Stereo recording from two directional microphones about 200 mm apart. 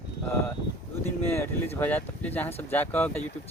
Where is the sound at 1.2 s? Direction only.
10° left (ahead or behind).